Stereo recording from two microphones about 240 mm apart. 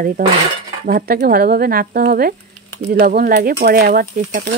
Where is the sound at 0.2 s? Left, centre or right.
Right.